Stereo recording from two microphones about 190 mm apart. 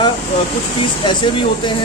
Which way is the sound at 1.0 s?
25° left (ahead or behind).